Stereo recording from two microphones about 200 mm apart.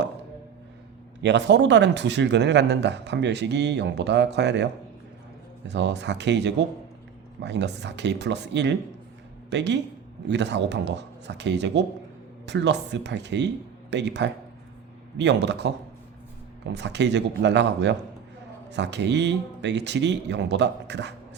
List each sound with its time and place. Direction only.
1.2 s a man's voice: 60° right (ahead or behind)